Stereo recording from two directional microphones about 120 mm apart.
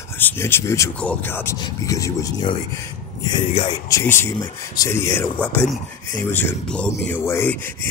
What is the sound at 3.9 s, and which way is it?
Speech, 20° left (ahead or behind).